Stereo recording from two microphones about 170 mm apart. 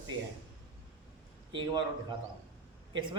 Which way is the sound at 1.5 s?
25° right (ahead or behind).